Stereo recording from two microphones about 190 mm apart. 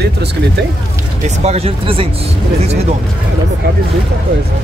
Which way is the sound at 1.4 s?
35° right (ahead or behind).